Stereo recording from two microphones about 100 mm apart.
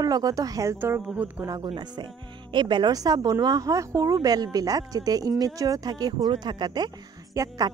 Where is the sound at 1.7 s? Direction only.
50° right (ahead or behind).